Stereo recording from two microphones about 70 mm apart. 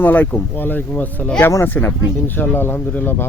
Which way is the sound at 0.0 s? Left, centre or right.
Left.